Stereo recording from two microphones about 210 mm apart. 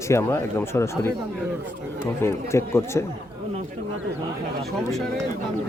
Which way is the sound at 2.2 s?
10° left (ahead or behind).